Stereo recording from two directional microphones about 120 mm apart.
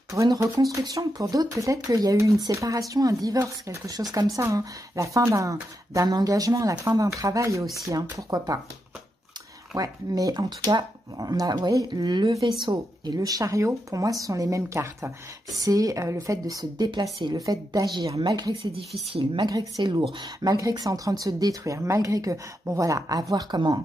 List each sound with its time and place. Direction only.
0.1 s speech: 25° right (ahead or behind)
7.6 s speech: centre (ahead or behind)
7.9 s speech: 30° right (ahead or behind)
9.8 s speech: 30° right (ahead or behind)
18.6 s speech: 55° right (ahead or behind)
19.4 s speech: 35° right (ahead or behind)